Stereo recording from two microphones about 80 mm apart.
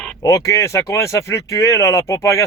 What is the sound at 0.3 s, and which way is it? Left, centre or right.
Speech, left.